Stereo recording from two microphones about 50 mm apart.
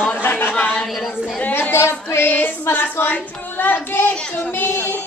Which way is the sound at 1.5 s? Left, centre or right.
Left.